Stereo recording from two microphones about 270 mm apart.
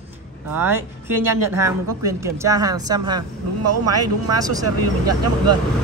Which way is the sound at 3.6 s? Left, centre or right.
Right.